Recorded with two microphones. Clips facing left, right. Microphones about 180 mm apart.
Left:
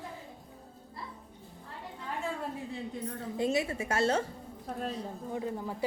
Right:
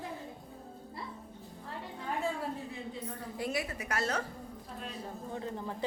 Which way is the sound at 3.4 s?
25° left (ahead or behind).